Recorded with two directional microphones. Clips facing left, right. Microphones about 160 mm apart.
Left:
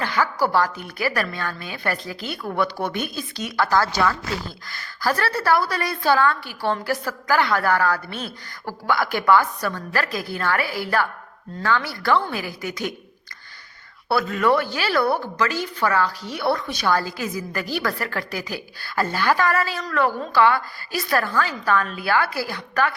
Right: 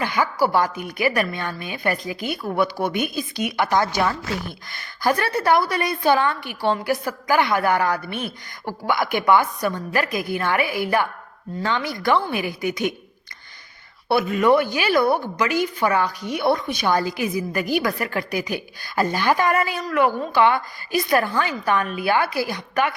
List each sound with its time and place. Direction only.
0.0 s a woman's voice: 15° right (ahead or behind)
14.1 s a woman's voice: 20° right (ahead or behind)